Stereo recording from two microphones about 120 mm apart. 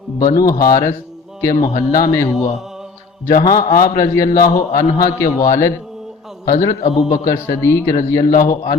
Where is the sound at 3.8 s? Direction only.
30° left (ahead or behind).